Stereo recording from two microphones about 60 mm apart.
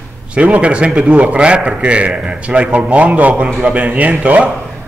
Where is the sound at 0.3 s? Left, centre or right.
Right.